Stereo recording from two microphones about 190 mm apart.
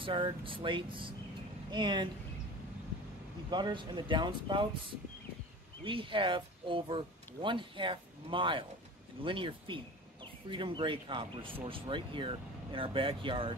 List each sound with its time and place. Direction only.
0.0 s speech: 25° right (ahead or behind)
3.4 s speech: 25° right (ahead or behind)